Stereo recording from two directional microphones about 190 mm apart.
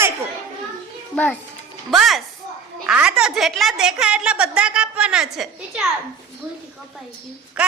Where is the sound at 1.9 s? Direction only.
Centre (ahead or behind).